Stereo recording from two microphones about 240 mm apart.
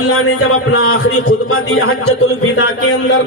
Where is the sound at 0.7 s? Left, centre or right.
Left.